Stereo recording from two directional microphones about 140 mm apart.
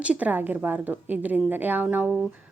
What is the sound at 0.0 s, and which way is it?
A woman's voice, 10° right (ahead or behind).